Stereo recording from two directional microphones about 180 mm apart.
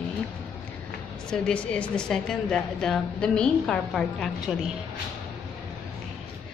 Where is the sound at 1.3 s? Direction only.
5° left (ahead or behind).